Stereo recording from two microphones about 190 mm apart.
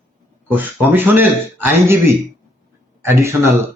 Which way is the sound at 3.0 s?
15° right (ahead or behind).